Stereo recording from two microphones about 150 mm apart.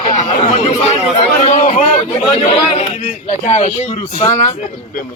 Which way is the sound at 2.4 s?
40° left (ahead or behind).